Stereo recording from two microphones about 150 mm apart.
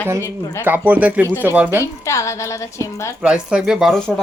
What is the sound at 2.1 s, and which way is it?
Speech, 20° left (ahead or behind).